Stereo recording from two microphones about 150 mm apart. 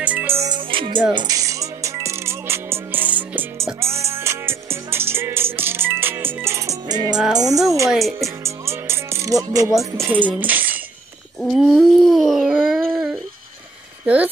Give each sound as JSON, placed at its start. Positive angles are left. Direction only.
{"t": 0.0, "sound": "music", "side_deg": -10}
{"t": 0.5, "sound": "music", "side_deg": -35}
{"t": 7.3, "sound": "speech", "side_deg": -25}
{"t": 7.9, "sound": "music", "side_deg": 0}
{"t": 8.5, "sound": "music", "side_deg": -15}
{"t": 9.9, "sound": "speech", "side_deg": -15}
{"t": 11.4, "sound": "babbling", "side_deg": 0}
{"t": 14.0, "sound": "speech", "side_deg": -10}